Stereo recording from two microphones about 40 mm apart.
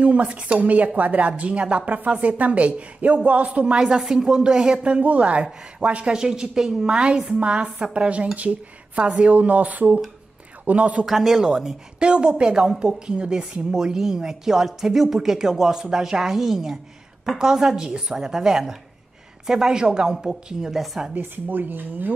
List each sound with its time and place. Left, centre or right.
0.0 s speech: right
3.7 s speech: centre; by 6.1 s right
6.1 s a woman's voice: centre
7.3 s speech: right
11.1 s speech: centre
11.3 s a woman's voice: right
20.7 s speech: centre
21.2 s speech: right